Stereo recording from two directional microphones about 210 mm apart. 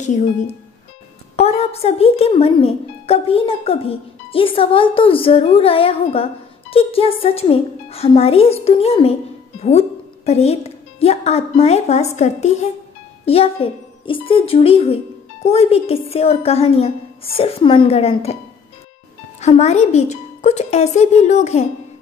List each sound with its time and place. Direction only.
0.0 s a woman's voice: 35° left (ahead or behind)
19.4 s speech: 30° left (ahead or behind)